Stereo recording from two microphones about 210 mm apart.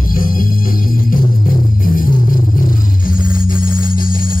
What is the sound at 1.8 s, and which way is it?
Music, 40° left (ahead or behind).